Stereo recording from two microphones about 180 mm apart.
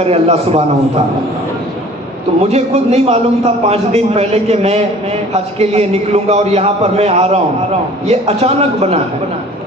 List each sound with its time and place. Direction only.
0.0 s a man's voice: 35° right (ahead or behind)
2.4 s a man's voice: 35° right (ahead or behind)